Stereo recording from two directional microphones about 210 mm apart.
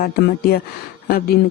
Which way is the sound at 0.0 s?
45° left (ahead or behind).